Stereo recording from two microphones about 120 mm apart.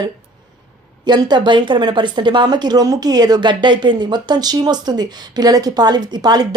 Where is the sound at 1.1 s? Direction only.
35° right (ahead or behind).